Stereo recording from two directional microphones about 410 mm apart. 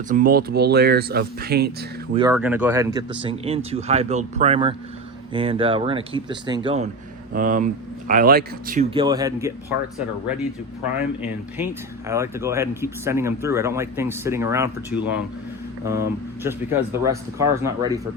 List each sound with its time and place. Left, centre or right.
0.1 s speech: centre
2.1 s speech: centre
11.2 s speech: centre